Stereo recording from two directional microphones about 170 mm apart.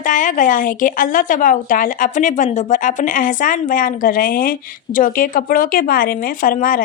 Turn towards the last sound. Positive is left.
turn(degrees=55)  # may be behind; listen again after turning